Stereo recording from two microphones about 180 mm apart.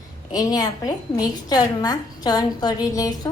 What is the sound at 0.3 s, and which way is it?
A woman's voice, 20° left (ahead or behind).